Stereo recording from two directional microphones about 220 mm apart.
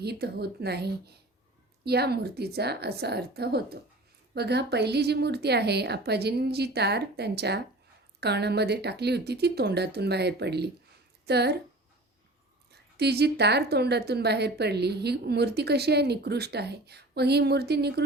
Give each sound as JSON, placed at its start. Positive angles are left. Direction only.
{"t": 0.0, "sound": "a woman's voice", "side_deg": -45}
{"t": 12.7, "sound": "a woman's voice", "side_deg": -50}